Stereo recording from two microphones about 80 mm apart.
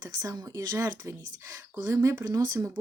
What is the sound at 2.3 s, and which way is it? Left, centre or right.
Speech, right.